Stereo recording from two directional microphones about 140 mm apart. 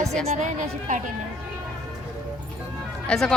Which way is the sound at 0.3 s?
60° right (ahead or behind).